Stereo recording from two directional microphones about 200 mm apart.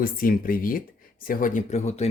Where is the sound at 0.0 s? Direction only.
45° left (ahead or behind).